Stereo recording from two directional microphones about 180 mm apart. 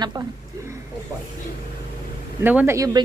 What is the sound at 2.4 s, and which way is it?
Speech, 10° right (ahead or behind).